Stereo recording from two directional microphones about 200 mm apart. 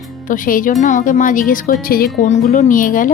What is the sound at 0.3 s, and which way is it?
A woman's voice, 45° left (ahead or behind).